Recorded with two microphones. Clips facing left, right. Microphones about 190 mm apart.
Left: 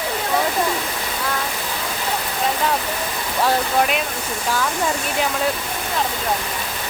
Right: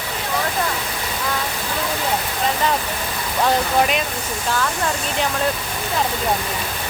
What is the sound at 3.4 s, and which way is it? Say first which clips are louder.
Speech: right 1 dB; 5° left (ahead or behind).